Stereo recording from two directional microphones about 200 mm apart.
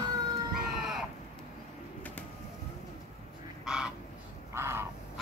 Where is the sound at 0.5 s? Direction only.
Centre (ahead or behind).